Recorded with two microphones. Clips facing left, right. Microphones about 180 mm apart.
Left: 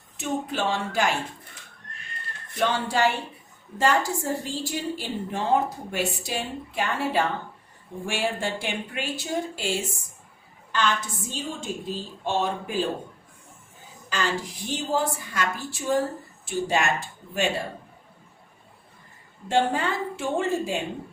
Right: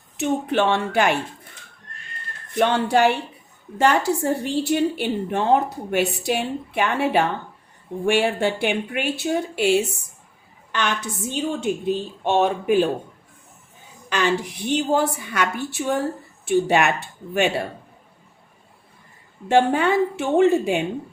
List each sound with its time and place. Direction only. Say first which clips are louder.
0.2 s a woman's voice: right 7 dB; 60° right (ahead or behind)
2.6 s a woman's voice: right 6 dB; 65° right (ahead or behind)
14.1 s a woman's voice: right 6 dB; 65° right (ahead or behind)
19.5 s a woman's voice: right 6 dB; 65° right (ahead or behind)